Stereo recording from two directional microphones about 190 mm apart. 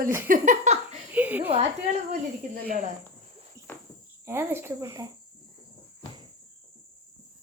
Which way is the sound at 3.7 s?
10° left (ahead or behind).